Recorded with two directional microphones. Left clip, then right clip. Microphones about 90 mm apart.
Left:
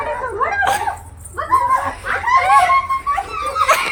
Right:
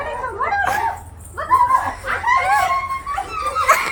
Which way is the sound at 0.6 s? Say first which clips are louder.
Left 3 dB; 15° left (ahead or behind).